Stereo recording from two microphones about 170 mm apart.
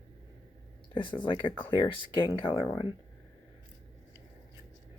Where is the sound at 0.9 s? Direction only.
30° left (ahead or behind).